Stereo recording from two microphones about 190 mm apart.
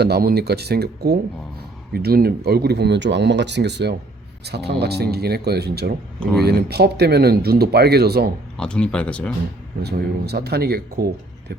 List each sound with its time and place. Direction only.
0.0 s speech: 55° right (ahead or behind)
8.5 s speech: 5° left (ahead or behind)
9.8 s speech: 60° right (ahead or behind)